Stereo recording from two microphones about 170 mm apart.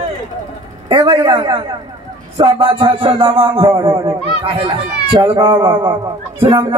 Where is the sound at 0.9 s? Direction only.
30° right (ahead or behind).